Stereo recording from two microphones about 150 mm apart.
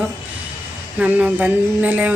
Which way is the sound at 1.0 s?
10° right (ahead or behind).